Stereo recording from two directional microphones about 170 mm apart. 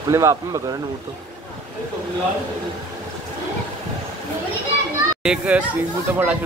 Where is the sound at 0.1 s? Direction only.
15° right (ahead or behind).